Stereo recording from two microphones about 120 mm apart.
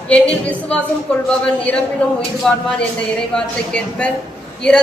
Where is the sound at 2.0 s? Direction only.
10° left (ahead or behind).